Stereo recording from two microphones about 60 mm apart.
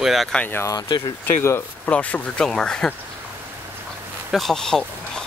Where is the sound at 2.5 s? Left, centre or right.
Centre.